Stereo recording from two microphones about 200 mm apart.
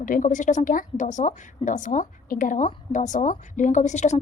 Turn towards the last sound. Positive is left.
turn(degrees=35)  # may be behind; listen again after turning